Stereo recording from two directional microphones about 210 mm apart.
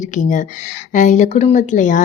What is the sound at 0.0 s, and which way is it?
A woman's voice, 35° left (ahead or behind).